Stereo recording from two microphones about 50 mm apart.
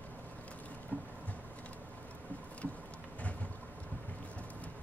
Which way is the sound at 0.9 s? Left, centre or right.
Left.